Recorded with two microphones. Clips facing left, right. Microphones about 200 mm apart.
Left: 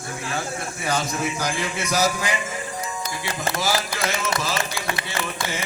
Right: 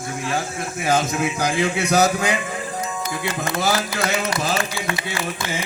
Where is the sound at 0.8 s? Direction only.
50° right (ahead or behind).